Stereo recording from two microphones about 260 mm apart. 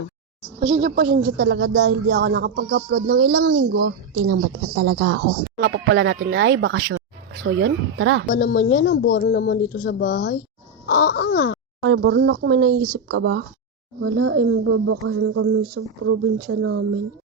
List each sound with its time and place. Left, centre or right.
0.6 s a woman's voice: right
8.3 s speech: left
11.8 s speech: right